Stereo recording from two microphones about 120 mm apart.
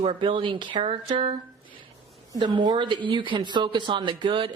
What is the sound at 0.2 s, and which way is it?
Speech, 45° right (ahead or behind).